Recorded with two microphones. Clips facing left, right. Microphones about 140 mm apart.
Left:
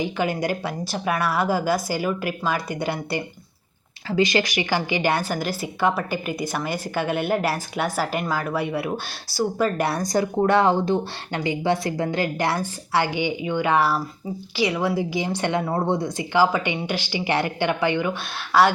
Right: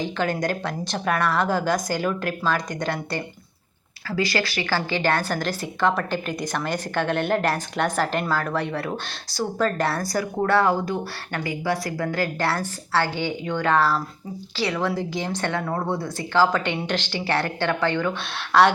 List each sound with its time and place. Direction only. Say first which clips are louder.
0.0 s a woman's voice: left 1 dB; 10° left (ahead or behind)
15.6 s a woman's voice: left 3 dB; 25° left (ahead or behind); by 18.7 s 5° left (ahead or behind)